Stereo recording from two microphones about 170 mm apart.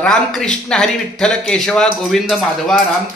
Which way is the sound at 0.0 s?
5° left (ahead or behind).